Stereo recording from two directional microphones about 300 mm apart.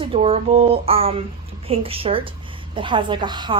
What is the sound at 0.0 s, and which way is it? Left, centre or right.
A woman's voice, centre.